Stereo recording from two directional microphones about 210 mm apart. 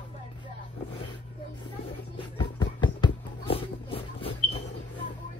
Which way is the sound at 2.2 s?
20° left (ahead or behind).